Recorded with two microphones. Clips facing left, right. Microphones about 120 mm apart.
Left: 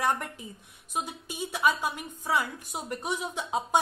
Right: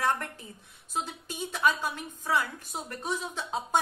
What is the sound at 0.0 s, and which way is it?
A woman's voice, 15° left (ahead or behind).